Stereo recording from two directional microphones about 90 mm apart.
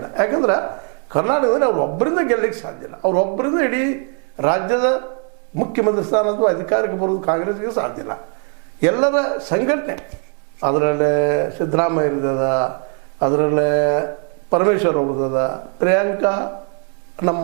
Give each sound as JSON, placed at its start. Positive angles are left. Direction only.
{"t": 0.0, "sound": "a woman's voice", "side_deg": -20}